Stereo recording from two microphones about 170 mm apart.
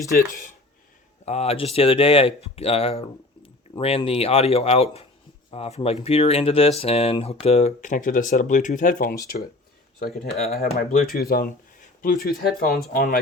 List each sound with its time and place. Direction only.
0.1 s speech: 60° left (ahead or behind)
1.2 s speech: 40° left (ahead or behind); by 9.1 s 55° left (ahead or behind)
10.2 s speech: 40° left (ahead or behind)
10.8 s speech: 60° left (ahead or behind)